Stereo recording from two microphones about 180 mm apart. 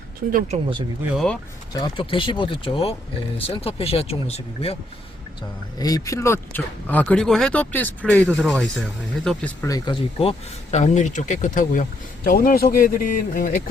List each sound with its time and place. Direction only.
0.3 s speech: 45° right (ahead or behind)
1.1 s speech: 5° left (ahead or behind)
1.7 s speech: 25° left (ahead or behind)
5.8 s speech: 20° left (ahead or behind)
9.6 s speech: 25° left (ahead or behind); by 13.6 s 50° left (ahead or behind)